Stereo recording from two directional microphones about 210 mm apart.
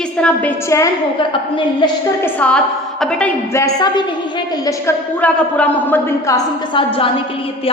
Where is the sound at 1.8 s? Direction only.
20° left (ahead or behind).